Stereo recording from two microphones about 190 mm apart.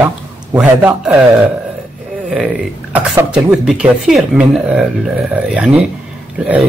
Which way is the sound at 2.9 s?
5° right (ahead or behind).